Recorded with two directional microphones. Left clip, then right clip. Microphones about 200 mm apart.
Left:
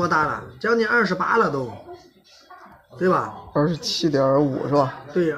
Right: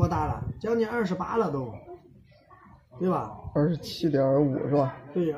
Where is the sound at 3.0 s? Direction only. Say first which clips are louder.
Left 8 dB; 5° right (ahead or behind).